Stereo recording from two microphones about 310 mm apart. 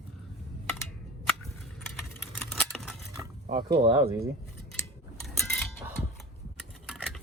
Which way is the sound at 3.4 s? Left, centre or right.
Centre.